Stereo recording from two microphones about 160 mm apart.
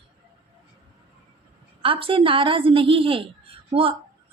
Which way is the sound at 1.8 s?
35° right (ahead or behind).